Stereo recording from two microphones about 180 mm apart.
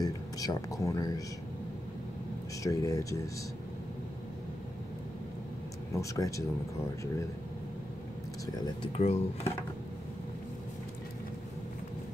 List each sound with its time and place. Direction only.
0.0 s speech: 20° left (ahead or behind)
2.6 s speech: 20° left (ahead or behind)
5.9 s speech: 20° left (ahead or behind)
8.9 s speech: 35° left (ahead or behind)